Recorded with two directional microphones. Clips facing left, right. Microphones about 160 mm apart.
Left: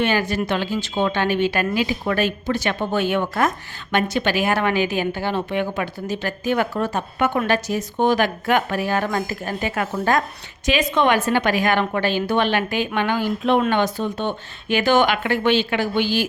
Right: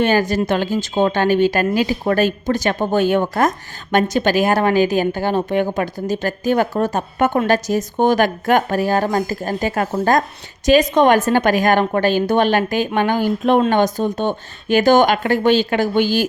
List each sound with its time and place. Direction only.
0.0 s a woman's voice: 40° right (ahead or behind)